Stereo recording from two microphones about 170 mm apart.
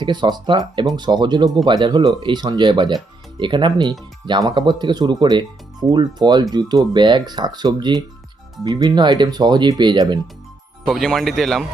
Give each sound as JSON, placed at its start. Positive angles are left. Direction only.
{"t": 0.0, "sound": "speech", "side_deg": -25}
{"t": 10.8, "sound": "speech", "side_deg": 0}